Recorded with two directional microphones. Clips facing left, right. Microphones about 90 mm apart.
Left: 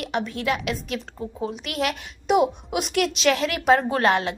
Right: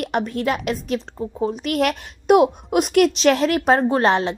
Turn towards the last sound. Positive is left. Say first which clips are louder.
# right 3 dB
turn(degrees=-30)  # may be behind; listen again after turning